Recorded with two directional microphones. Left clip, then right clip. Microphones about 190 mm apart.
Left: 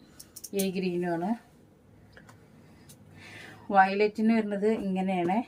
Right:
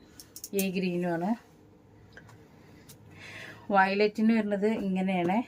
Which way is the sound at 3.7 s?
25° right (ahead or behind).